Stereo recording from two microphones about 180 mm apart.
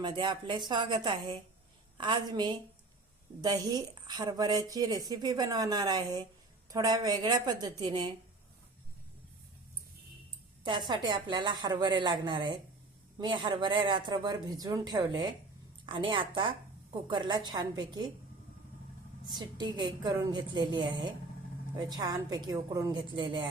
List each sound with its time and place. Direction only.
0.0 s speech: 25° right (ahead or behind)
10.6 s speech: 25° right (ahead or behind)
19.3 s speech: 25° right (ahead or behind)